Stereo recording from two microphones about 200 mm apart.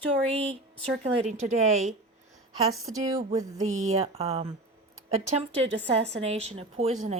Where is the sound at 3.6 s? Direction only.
35° right (ahead or behind).